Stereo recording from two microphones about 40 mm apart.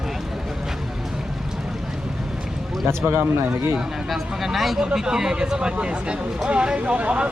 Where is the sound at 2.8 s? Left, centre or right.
Right.